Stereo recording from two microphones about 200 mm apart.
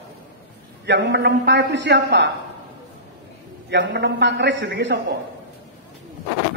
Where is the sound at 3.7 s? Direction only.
60° right (ahead or behind).